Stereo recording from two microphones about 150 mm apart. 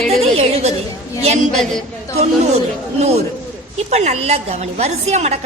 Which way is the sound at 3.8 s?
50° right (ahead or behind).